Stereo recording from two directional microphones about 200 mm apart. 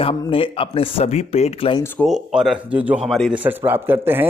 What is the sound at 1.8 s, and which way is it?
Speech, 5° left (ahead or behind).